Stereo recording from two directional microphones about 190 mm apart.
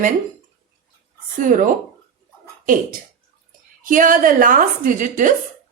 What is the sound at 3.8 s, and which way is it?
A woman's voice, 45° right (ahead or behind).